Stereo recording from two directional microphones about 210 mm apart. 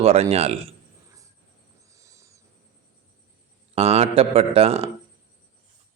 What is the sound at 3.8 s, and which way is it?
Speech, 30° right (ahead or behind).